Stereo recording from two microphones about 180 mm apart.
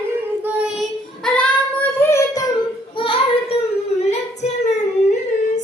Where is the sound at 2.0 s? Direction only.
15° left (ahead or behind).